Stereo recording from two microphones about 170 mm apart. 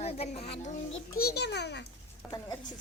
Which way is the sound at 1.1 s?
70° left (ahead or behind).